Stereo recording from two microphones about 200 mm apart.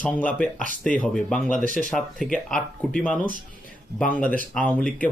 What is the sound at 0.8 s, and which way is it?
Speech, 40° left (ahead or behind).